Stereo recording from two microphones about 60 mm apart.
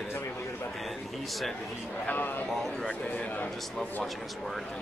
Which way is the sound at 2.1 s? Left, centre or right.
Left.